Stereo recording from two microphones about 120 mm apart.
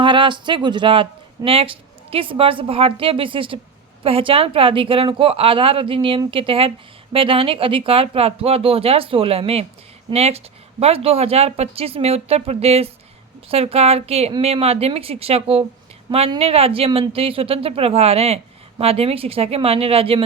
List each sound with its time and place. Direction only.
0.0 s a woman's voice: 45° right (ahead or behind)